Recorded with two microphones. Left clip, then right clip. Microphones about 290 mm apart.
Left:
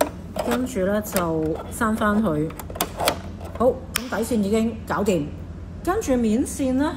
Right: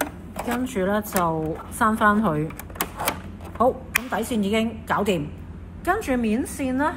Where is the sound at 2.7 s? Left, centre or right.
Centre.